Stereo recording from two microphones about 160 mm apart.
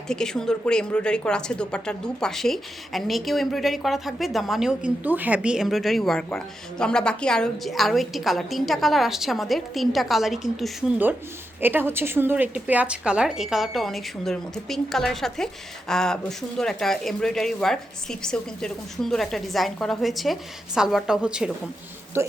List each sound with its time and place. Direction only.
0.1 s speech: 5° left (ahead or behind)
22.2 s a man's voice: 15° right (ahead or behind)